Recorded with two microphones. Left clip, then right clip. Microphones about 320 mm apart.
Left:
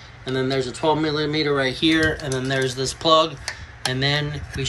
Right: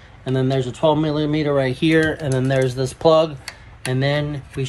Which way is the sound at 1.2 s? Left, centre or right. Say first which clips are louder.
Right 2 dB; right.